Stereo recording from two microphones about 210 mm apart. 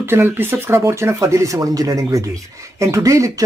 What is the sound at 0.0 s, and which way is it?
Speech, 10° right (ahead or behind).